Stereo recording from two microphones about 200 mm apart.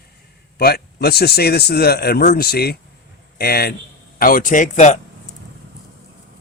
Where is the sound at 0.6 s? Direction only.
50° left (ahead or behind).